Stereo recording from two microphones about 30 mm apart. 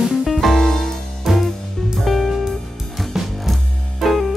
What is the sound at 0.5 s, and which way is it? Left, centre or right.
Music, centre.